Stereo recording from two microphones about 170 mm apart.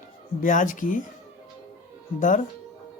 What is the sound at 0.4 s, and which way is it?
Speech, 50° left (ahead or behind).